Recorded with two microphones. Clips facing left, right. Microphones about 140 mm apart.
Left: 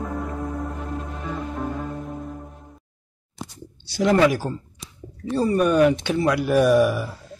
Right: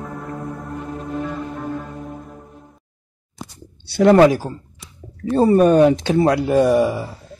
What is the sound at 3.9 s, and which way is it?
Speech, 65° right (ahead or behind).